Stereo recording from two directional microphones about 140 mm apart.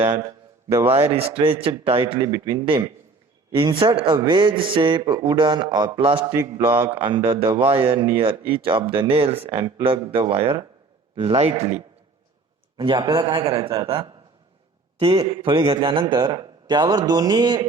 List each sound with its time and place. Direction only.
0.0 s a man's voice: 15° right (ahead or behind)
1.1 s speech: 40° right (ahead or behind)
6.3 s a man's voice: 15° right (ahead or behind)
6.9 s a man's voice: 35° right (ahead or behind)
11.5 s speech: 50° right (ahead or behind)
12.7 s speech: 30° right (ahead or behind)
13.5 s speech: 40° right (ahead or behind)
14.9 s a man's voice: 40° right (ahead or behind)